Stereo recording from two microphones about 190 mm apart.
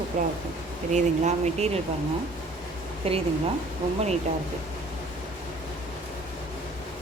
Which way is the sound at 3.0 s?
30° right (ahead or behind).